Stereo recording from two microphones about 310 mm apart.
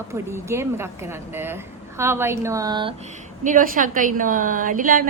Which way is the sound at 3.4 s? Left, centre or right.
Right.